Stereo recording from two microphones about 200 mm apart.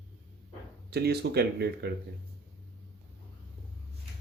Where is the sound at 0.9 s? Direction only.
50° right (ahead or behind).